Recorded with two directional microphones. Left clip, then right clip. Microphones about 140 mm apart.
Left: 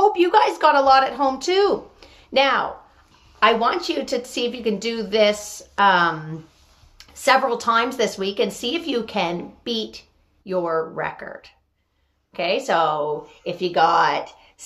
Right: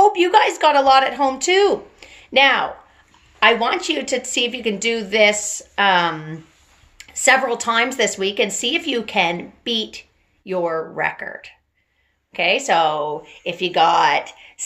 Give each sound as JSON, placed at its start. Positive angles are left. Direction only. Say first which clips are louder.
{"t": 0.0, "sound": "a woman's voice", "louder": "right 2 dB", "side_deg": -20}